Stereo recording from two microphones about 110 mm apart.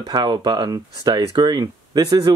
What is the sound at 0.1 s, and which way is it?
Speech, 40° right (ahead or behind).